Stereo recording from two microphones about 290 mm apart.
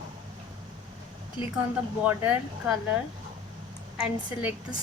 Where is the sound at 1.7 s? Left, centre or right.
Centre.